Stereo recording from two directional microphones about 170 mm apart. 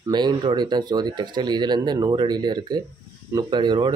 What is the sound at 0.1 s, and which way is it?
Speech, 25° right (ahead or behind).